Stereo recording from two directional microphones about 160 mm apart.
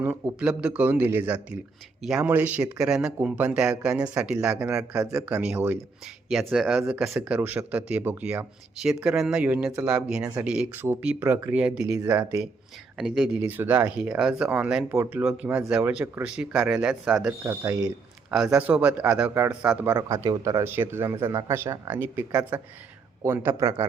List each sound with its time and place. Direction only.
0.0 s speech: 5° right (ahead or behind)
13.0 s speech: centre (ahead or behind)
17.4 s speech: 20° right (ahead or behind)
18.3 s speech: 5° right (ahead or behind)